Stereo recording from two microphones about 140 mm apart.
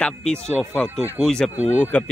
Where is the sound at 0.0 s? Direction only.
5° left (ahead or behind).